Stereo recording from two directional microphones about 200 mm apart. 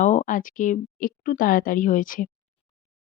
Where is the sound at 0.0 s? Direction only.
40° left (ahead or behind).